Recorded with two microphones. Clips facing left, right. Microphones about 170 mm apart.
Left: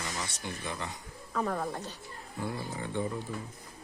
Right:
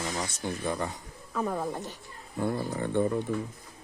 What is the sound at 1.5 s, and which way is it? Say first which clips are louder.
Speech: right 2 dB; 15° right (ahead or behind).